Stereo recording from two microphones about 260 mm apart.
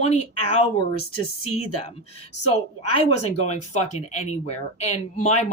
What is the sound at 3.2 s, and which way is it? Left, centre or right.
Speech, left.